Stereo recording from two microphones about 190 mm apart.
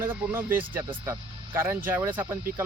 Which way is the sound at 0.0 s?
10° right (ahead or behind).